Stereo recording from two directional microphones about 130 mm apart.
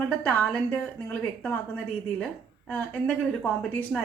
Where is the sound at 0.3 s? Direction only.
15° left (ahead or behind).